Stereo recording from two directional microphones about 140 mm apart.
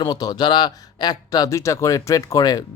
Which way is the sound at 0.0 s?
30° left (ahead or behind).